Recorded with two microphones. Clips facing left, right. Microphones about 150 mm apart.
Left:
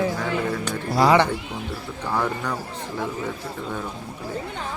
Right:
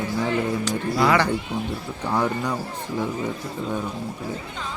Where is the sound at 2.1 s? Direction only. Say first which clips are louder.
Right 2 dB; 15° right (ahead or behind).